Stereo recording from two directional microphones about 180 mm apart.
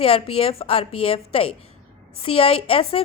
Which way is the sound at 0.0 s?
30° left (ahead or behind).